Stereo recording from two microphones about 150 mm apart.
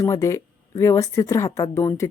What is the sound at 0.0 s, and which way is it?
Speech, 20° left (ahead or behind).